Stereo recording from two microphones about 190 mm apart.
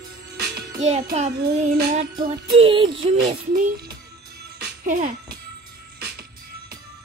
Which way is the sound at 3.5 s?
45° right (ahead or behind).